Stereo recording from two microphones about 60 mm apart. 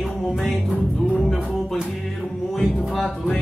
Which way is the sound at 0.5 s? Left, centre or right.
Centre.